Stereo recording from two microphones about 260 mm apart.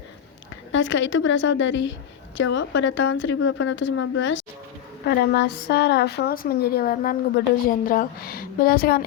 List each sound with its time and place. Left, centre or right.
0.5 s a woman's voice: left